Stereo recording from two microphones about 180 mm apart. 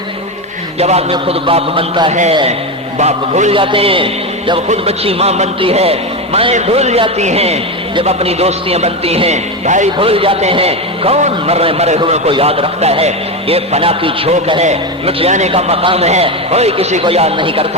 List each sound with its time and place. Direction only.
0.8 s a man's voice: 35° right (ahead or behind)
3.0 s a man's voice: 40° right (ahead or behind)